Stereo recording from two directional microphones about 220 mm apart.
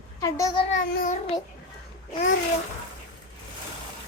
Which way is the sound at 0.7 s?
35° left (ahead or behind).